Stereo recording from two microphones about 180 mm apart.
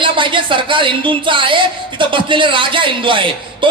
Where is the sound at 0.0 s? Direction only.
30° right (ahead or behind).